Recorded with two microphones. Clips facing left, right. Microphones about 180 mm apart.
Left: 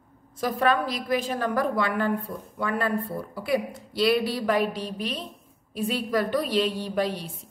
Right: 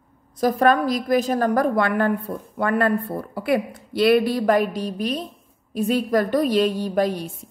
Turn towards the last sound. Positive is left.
turn(degrees=-45)  # may be behind; listen again after turning